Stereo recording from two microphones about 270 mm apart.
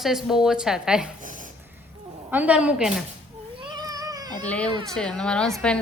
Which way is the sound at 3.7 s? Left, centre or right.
Centre.